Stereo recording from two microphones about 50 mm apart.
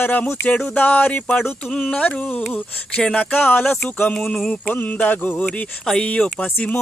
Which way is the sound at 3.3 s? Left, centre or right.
Left.